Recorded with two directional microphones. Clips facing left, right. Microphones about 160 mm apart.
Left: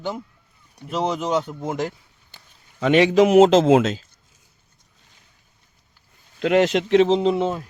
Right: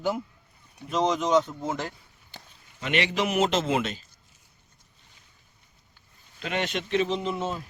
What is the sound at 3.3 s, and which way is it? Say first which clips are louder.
Speech: left 11 dB; 90° left.